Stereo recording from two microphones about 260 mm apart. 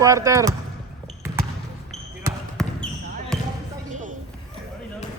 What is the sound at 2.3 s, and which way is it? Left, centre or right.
Basketball bounce, centre.